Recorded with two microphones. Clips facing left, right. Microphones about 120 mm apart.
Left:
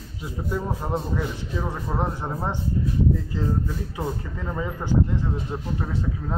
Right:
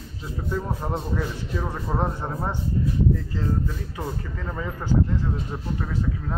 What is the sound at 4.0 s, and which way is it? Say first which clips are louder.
Speech: left 1 dB; 15° left (ahead or behind).